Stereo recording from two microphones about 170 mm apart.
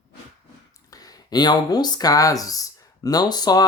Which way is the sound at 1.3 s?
25° left (ahead or behind).